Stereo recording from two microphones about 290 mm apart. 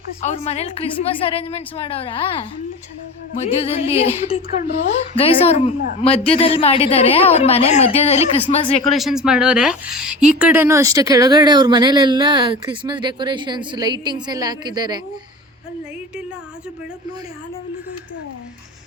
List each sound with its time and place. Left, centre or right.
0.2 s a woman's voice: left
8.9 s a woman's voice: centre